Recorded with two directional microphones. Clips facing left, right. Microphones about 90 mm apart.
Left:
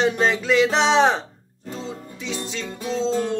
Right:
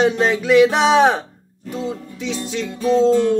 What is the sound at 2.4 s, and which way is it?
Music, 20° left (ahead or behind).